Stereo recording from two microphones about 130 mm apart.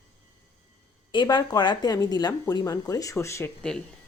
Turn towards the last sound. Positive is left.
turn(degrees=5)  # may be behind; listen again after turning